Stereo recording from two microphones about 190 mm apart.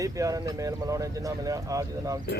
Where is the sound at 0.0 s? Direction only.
20° right (ahead or behind).